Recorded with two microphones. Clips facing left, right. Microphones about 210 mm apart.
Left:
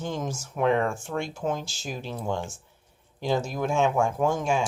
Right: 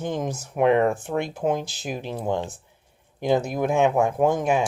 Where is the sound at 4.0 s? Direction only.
35° right (ahead or behind).